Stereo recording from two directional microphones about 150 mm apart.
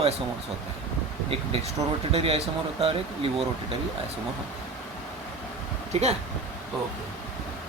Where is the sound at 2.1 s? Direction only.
40° right (ahead or behind).